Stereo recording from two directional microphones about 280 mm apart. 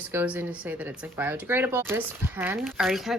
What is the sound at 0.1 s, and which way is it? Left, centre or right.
Speech, centre.